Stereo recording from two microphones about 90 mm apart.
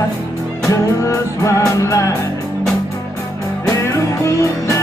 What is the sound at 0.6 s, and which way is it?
Music, 35° left (ahead or behind).